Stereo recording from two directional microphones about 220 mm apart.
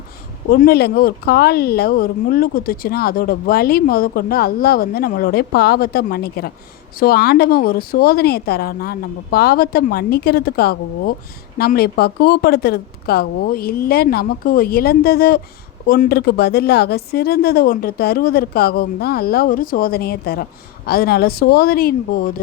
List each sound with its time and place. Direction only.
0.5 s speech: 45° left (ahead or behind)